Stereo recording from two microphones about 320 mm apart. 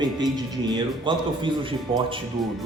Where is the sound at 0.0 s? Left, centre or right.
Centre.